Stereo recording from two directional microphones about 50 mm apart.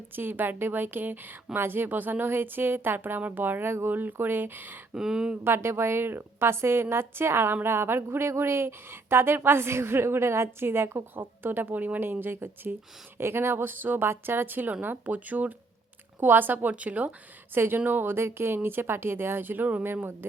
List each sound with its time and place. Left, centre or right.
0.2 s speech: right
4.9 s speech: centre
5.4 s a woman's voice: right
17.5 s speech: right
19.8 s speech: right